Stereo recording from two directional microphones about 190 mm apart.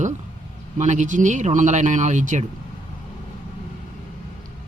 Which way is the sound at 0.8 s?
40° right (ahead or behind).